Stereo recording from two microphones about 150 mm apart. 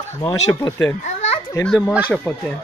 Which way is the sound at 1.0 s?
45° left (ahead or behind).